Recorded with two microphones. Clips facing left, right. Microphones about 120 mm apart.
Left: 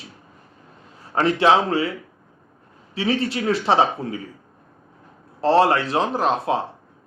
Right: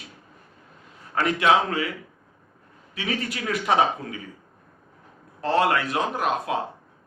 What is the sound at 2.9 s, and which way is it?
Speech, 30° left (ahead or behind).